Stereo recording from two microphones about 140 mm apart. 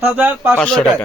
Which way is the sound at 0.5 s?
5° left (ahead or behind).